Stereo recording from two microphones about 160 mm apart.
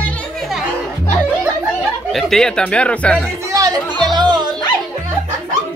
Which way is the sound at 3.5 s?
25° right (ahead or behind).